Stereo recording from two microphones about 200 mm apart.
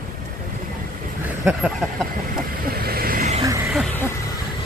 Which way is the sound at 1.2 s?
5° right (ahead or behind).